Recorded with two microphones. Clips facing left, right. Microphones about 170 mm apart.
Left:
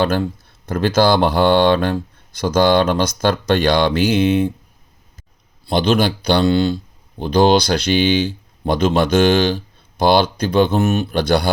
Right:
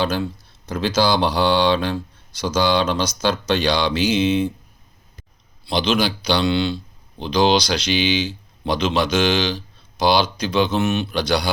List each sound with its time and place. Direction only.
0.0 s speech: 55° left (ahead or behind)
5.6 s speech: 50° left (ahead or behind)